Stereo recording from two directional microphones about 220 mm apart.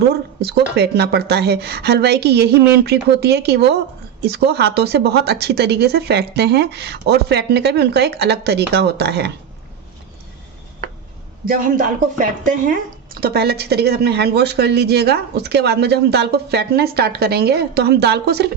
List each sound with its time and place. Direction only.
0.1 s a woman's voice: 50° right (ahead or behind)
11.4 s a woman's voice: 35° right (ahead or behind)